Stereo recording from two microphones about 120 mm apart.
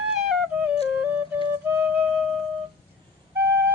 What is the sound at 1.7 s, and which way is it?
Flute, 15° right (ahead or behind).